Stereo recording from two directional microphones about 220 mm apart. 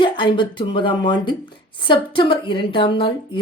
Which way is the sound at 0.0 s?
20° left (ahead or behind).